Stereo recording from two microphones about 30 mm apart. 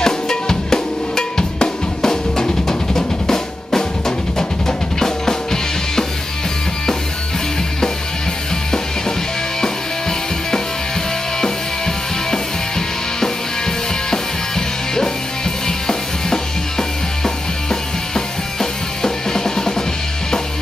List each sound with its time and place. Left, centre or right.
0.0 s drum: centre
4.4 s music: centre
12.3 s music: centre
15.6 s music: centre